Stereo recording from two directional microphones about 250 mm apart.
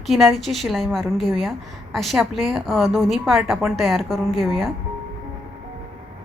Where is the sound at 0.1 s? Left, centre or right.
Centre.